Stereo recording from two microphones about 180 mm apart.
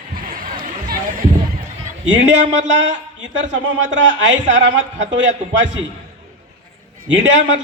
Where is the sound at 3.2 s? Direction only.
90° right.